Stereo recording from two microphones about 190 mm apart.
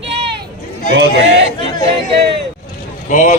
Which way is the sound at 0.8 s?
65° right (ahead or behind).